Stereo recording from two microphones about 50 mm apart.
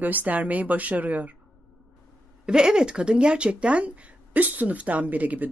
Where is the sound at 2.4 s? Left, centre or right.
Centre.